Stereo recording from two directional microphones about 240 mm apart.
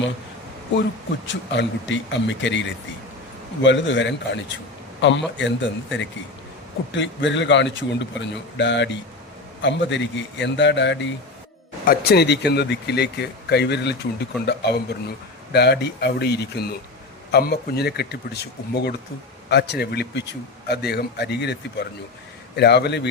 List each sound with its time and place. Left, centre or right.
1.3 s a man's voice: left